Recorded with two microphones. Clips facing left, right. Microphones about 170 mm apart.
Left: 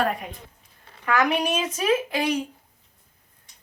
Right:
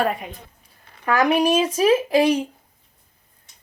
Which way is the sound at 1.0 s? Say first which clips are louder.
Right 5 dB; 30° right (ahead or behind).